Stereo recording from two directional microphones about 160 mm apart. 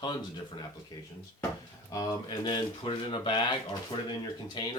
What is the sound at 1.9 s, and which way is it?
Speech, 25° left (ahead or behind).